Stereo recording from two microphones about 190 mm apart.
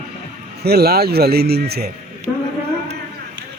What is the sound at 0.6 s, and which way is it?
Speech, 55° right (ahead or behind).